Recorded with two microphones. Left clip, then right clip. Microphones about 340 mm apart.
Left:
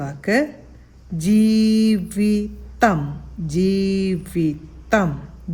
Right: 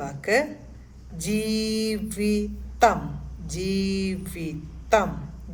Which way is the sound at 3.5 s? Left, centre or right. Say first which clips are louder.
Left 7 dB; left.